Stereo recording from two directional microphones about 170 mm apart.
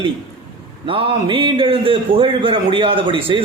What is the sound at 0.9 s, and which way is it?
A man's voice, 30° right (ahead or behind).